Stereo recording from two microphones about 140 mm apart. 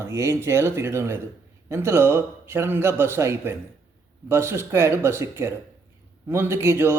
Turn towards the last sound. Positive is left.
turn(degrees=-20)  # may be behind; listen again after turning